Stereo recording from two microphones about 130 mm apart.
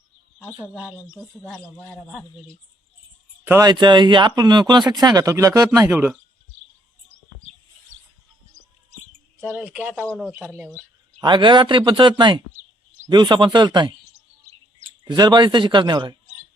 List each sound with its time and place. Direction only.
1.5 s a man's voice: centre (ahead or behind)
2.0 s speech: 10° right (ahead or behind)
3.6 s speech: 35° right (ahead or behind); by 6.1 s 20° right (ahead or behind)
9.5 s speech: 15° right (ahead or behind)
11.2 s speech: 35° right (ahead or behind)
15.0 s speech: 35° right (ahead or behind)